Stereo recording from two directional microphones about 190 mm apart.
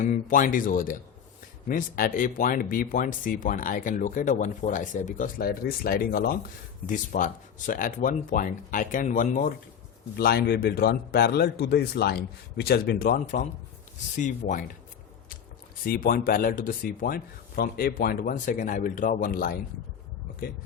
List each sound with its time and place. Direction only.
0.0 s speech: 40° left (ahead or behind)
10.2 s a man's voice: 60° left (ahead or behind); by 14.6 s 40° left (ahead or behind)
15.8 s speech: 50° left (ahead or behind)